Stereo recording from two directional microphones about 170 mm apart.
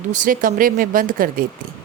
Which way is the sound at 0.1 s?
50° right (ahead or behind).